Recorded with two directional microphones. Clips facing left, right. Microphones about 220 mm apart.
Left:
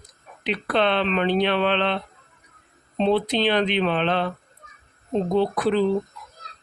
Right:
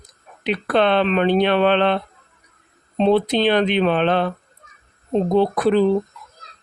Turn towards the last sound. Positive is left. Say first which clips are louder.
# right 4 dB
turn(degrees=-50)  # may be behind; listen again after turning